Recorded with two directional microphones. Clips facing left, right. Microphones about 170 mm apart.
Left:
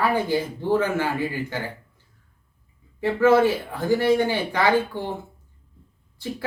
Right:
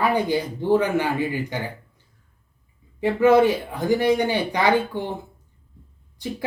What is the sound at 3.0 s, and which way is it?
Speech, 15° right (ahead or behind).